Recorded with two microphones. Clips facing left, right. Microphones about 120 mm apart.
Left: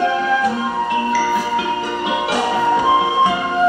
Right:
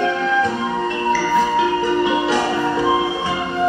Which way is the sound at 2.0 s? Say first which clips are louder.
Right 1 dB; 20° left (ahead or behind).